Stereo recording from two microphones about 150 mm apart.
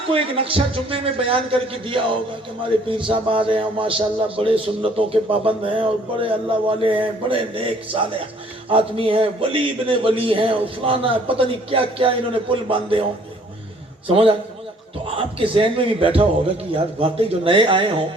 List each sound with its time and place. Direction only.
0.1 s a man's voice: 40° right (ahead or behind)
14.1 s a man's voice: 40° right (ahead or behind)